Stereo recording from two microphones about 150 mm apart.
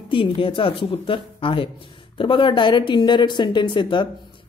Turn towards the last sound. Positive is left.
turn(degrees=35)  # may be behind; listen again after turning